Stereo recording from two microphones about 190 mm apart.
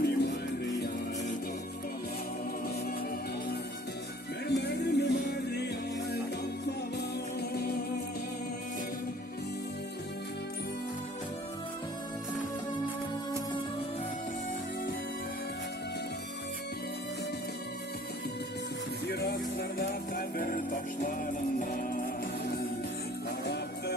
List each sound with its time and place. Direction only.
0.0 s music: 60° left (ahead or behind)
4.4 s music: 60° left (ahead or behind)
7.5 s music: 55° left (ahead or behind)
19.0 s music: 55° left (ahead or behind)